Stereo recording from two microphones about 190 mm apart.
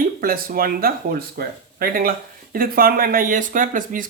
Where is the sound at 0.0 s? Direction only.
50° right (ahead or behind).